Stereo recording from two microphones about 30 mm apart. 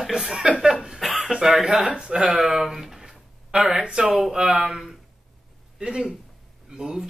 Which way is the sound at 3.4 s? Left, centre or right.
Right.